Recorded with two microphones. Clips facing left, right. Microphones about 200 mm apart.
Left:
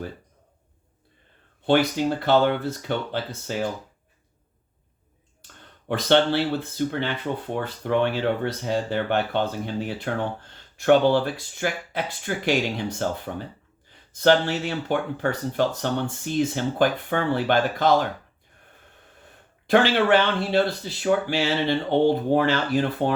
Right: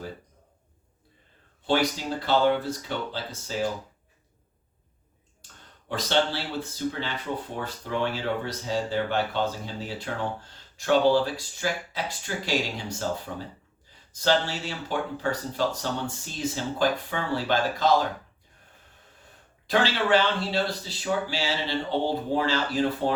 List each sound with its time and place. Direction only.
2.2 s speech: 60° left (ahead or behind)
5.9 s speech: 60° left (ahead or behind)
19.6 s speech: 55° left (ahead or behind)